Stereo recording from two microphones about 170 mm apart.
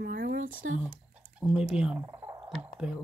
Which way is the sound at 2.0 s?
20° right (ahead or behind).